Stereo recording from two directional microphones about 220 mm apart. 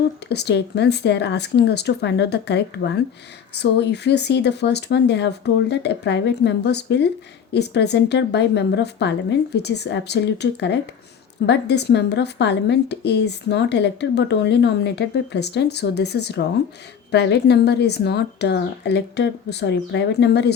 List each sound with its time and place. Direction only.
0.3 s speech: 50° left (ahead or behind)